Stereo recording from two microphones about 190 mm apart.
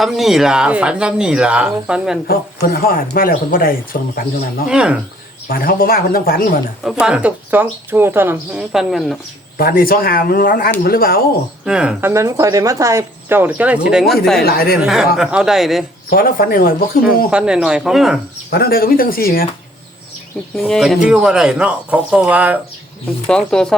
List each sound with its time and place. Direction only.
0.0 s speech: centre (ahead or behind)
2.2 s speech: 55° left (ahead or behind)
4.7 s speech: 5° right (ahead or behind)
5.5 s speech: 50° left (ahead or behind)
7.0 s speech: 5° right (ahead or behind)
9.6 s speech: 50° left (ahead or behind)
11.6 s speech: 5° right (ahead or behind)
14.4 s speech: 50° left (ahead or behind)
14.8 s speech: 5° right (ahead or behind)
16.0 s speech: 50° left (ahead or behind)
17.3 s speech: 5° right (ahead or behind)
18.5 s speech: 50° left (ahead or behind)
20.6 s speech: centre (ahead or behind)
23.2 s speech: 5° left (ahead or behind)